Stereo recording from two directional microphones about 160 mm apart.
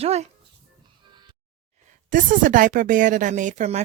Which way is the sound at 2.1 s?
55° right (ahead or behind).